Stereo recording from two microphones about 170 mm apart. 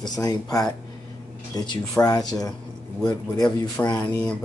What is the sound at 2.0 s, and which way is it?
Speech, 10° left (ahead or behind).